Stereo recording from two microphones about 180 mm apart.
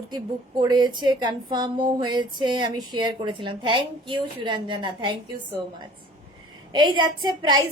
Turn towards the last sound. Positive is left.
turn(degrees=-25)  # may be behind; listen again after turning